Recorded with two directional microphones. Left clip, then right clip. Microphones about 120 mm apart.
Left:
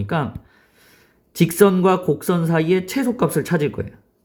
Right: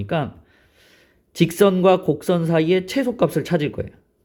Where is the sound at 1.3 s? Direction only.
35° right (ahead or behind).